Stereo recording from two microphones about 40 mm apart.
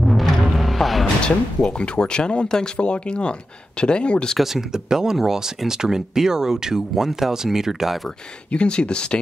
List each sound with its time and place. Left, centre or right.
0.0 s music: centre
1.2 s speech: left
4.4 s speech: centre
8.5 s speech: left